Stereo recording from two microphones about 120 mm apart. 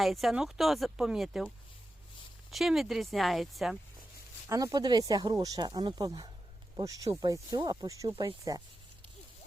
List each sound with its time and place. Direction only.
0.0 s speech: centre (ahead or behind)
2.5 s speech: centre (ahead or behind)
4.4 s speech: 30° right (ahead or behind)